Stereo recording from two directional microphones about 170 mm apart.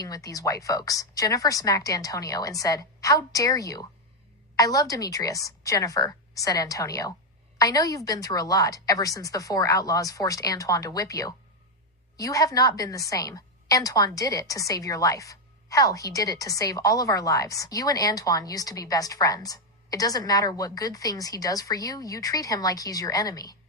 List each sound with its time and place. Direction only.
0.0 s a woman's voice: 20° left (ahead or behind)